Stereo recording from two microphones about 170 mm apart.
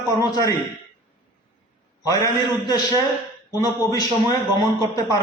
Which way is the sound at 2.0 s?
20° left (ahead or behind).